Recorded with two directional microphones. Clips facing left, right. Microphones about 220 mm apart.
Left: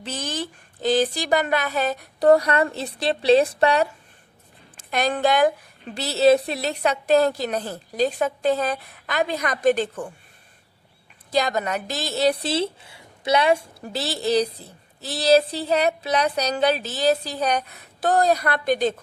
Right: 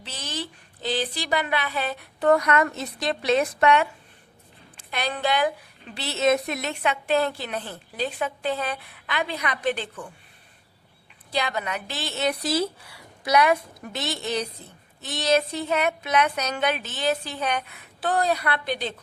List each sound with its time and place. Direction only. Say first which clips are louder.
0.0 s a woman's voice: left 5 dB; 50° left (ahead or behind); by 3.8 s 35° left (ahead or behind)
4.8 s a woman's voice: left 6 dB; 45° left (ahead or behind)
11.3 s speech: left 5 dB; 40° left (ahead or behind)